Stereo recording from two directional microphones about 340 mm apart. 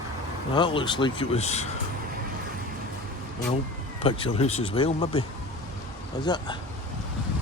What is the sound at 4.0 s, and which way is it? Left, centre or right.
Speech, centre.